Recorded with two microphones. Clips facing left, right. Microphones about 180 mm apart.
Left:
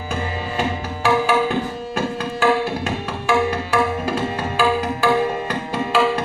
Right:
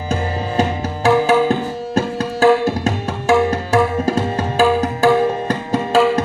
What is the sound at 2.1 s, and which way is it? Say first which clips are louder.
Tabla: right 6 dB; 45° right (ahead or behind).